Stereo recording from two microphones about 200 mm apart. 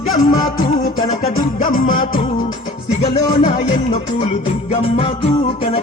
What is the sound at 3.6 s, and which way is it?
Music, 35° left (ahead or behind).